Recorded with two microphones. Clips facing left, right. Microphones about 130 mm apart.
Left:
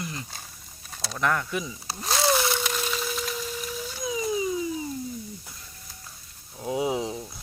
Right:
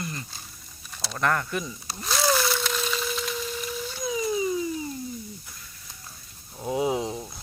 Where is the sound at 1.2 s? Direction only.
5° left (ahead or behind).